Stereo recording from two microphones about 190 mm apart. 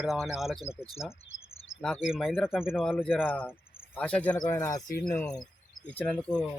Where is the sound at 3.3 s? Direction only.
10° left (ahead or behind).